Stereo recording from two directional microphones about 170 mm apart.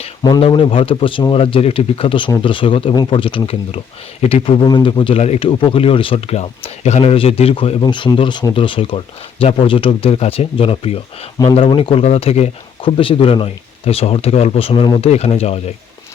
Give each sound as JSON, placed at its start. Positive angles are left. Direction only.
{"t": 0.2, "sound": "speech", "side_deg": 25}